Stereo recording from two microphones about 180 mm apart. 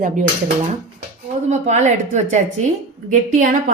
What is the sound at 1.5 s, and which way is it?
A woman's voice, 40° right (ahead or behind).